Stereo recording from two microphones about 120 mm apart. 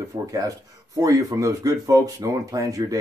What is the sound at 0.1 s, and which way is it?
Speech, 35° right (ahead or behind).